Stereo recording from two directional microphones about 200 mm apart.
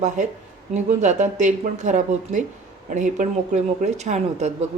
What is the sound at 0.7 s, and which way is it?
Speech, 35° right (ahead or behind).